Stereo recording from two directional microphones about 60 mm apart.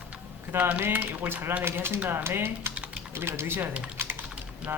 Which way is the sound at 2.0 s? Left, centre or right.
Right.